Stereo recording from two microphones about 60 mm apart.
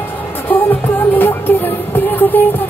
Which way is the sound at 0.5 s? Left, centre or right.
Left.